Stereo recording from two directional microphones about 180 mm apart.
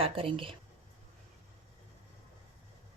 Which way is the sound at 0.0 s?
30° right (ahead or behind).